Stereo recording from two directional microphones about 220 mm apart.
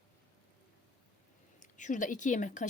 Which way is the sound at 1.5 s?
35° left (ahead or behind).